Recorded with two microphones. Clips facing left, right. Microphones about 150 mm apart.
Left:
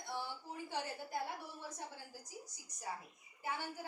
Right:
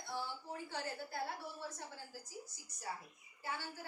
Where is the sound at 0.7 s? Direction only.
15° left (ahead or behind).